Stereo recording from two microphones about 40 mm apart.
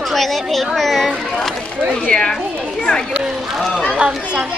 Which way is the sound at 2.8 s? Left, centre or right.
Centre.